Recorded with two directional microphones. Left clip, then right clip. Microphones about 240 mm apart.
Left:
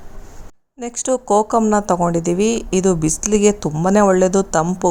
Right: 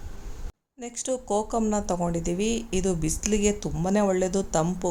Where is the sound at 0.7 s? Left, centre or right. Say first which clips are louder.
Left 10 dB; left.